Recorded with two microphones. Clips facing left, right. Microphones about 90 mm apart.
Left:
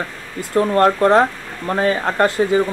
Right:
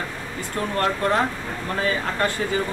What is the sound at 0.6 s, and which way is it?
Speech, 40° left (ahead or behind).